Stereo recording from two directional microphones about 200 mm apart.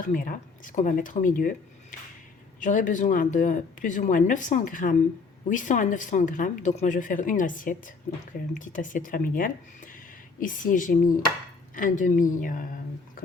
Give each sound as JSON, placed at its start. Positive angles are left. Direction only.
{"t": 0.1, "sound": "a woman's voice", "side_deg": 45}